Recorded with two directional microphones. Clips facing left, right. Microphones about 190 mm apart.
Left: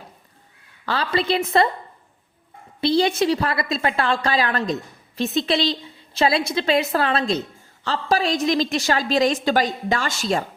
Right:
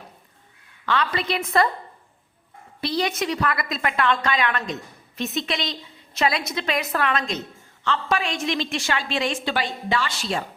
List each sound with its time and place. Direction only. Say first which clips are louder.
0.9 s a woman's voice: left 3 dB; 30° left (ahead or behind)
2.8 s a woman's voice: left 6 dB; 30° left (ahead or behind); by 10.4 s 45° left (ahead or behind)